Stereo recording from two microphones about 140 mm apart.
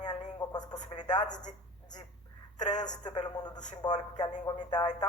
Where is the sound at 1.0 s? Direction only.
30° left (ahead or behind).